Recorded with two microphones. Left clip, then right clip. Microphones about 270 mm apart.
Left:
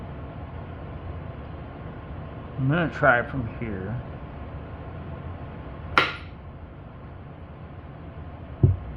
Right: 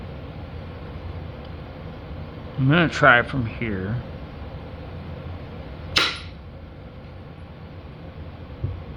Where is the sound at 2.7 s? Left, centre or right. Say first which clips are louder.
Right 5 dB; right.